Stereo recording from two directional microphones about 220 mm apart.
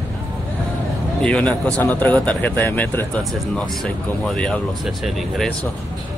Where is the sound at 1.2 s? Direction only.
5° left (ahead or behind).